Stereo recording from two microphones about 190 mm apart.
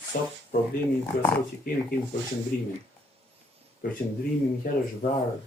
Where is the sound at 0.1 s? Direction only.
45° left (ahead or behind).